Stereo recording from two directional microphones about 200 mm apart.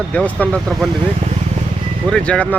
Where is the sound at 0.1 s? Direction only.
5° left (ahead or behind).